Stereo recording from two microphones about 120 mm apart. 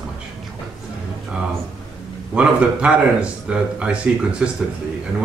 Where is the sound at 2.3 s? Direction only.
10° right (ahead or behind).